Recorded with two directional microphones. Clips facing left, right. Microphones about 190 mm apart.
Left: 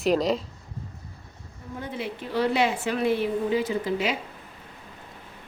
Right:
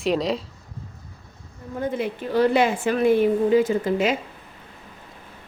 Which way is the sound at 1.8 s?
50° right (ahead or behind).